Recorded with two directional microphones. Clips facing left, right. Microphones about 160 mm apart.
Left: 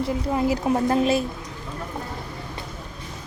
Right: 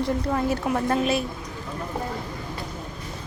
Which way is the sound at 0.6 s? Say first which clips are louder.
Left 3 dB; 25° left (ahead or behind).